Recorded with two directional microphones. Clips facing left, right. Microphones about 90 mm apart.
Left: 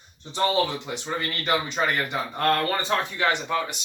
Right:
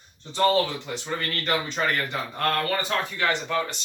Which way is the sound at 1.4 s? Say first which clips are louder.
Left 1 dB; 15° left (ahead or behind).